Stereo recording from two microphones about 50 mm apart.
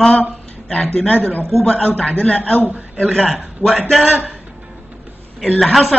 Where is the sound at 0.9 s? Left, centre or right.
Left.